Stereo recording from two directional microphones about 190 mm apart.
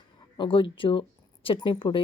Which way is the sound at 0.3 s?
25° left (ahead or behind).